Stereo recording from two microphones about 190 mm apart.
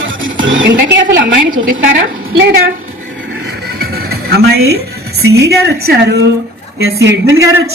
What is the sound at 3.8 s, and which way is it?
Music, 55° right (ahead or behind).